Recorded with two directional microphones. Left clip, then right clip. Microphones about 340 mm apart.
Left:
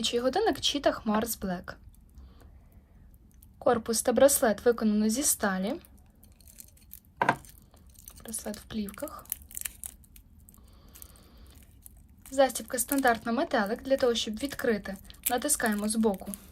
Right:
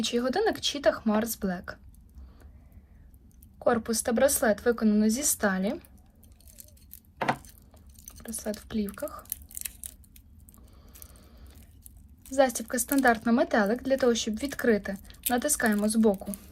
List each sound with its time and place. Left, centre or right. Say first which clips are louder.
0.0 s a woman's voice: even; centre
3.6 s a woman's voice: even; centre
8.0 s speech: right 4 dB; centre
12.3 s a woman's voice: right 1 dB; centre